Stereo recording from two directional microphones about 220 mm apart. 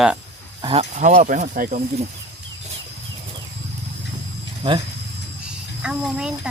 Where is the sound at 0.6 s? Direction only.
25° right (ahead or behind).